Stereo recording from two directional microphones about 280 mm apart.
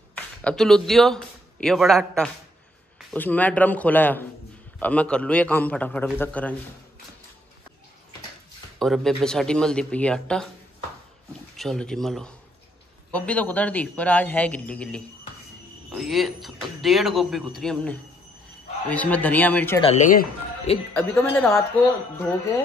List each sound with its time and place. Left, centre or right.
0.1 s a man's voice: centre
8.7 s speech: centre
11.5 s speech: centre
19.8 s speech: left
20.9 s speech: centre